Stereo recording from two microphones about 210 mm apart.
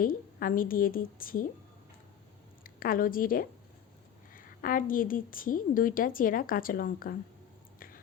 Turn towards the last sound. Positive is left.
turn(degrees=40)  # may be behind; listen again after turning